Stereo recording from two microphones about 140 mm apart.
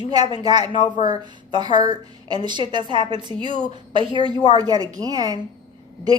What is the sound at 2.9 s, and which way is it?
A woman's voice, 35° right (ahead or behind).